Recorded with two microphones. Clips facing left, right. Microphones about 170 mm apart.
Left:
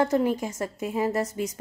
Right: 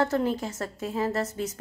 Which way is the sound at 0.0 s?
15° left (ahead or behind).